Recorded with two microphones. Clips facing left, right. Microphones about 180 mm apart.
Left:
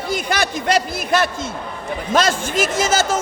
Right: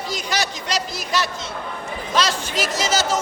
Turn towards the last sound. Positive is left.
turn(degrees=50)  # may be behind; listen again after turning